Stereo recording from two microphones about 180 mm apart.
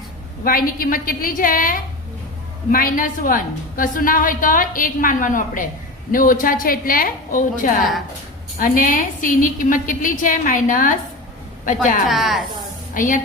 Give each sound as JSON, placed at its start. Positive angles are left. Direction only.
{"t": 0.4, "sound": "a woman's voice", "side_deg": 50}
{"t": 12.0, "sound": "speech", "side_deg": 0}
{"t": 12.9, "sound": "a woman's voice", "side_deg": 45}